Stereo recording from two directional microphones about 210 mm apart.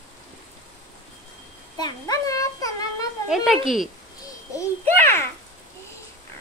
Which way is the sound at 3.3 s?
Centre (ahead or behind).